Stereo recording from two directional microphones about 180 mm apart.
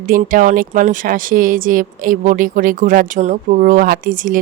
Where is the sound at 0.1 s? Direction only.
50° right (ahead or behind).